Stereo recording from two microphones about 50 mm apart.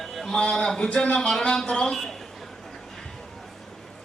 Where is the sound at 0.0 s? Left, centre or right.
Centre.